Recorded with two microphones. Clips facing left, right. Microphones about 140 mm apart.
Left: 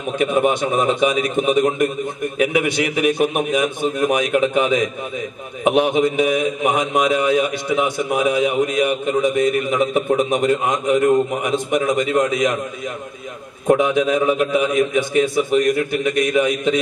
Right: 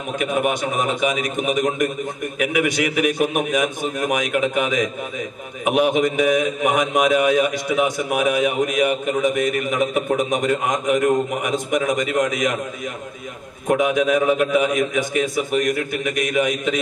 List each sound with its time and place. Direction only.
0.2 s a man's voice: 30° left (ahead or behind)
13.7 s a man's voice: 30° left (ahead or behind)